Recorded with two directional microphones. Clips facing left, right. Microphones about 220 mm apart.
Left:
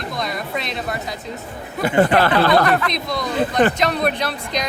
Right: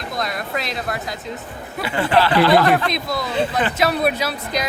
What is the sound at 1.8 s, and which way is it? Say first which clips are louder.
Speech: left 3 dB; 50° left (ahead or behind).